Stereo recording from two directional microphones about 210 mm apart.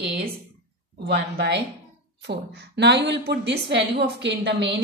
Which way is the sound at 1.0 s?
55° right (ahead or behind).